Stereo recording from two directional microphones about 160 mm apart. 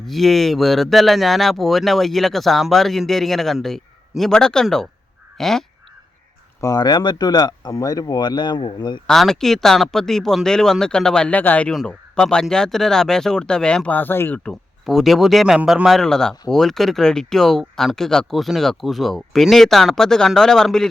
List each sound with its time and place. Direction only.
0.1 s speech: centre (ahead or behind)
6.6 s speech: 25° left (ahead or behind)
9.0 s speech: centre (ahead or behind)